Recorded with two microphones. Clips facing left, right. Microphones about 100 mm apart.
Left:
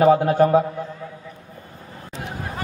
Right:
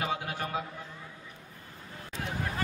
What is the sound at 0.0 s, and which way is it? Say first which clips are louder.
Speech: left 19 dB; 40° left (ahead or behind).